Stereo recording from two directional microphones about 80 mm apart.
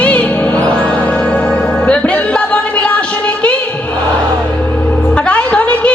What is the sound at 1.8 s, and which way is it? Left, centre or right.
Music, centre.